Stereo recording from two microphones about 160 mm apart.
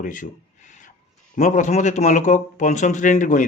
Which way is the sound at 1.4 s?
50° left (ahead or behind).